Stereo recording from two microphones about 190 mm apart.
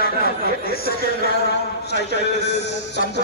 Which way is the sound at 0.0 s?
55° left (ahead or behind).